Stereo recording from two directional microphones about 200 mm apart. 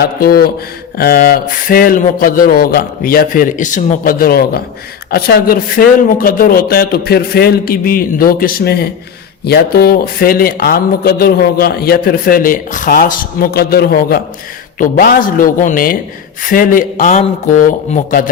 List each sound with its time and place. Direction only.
0.0 s a man's voice: 50° left (ahead or behind)